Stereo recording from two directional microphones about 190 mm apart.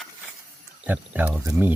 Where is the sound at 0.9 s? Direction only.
10° right (ahead or behind).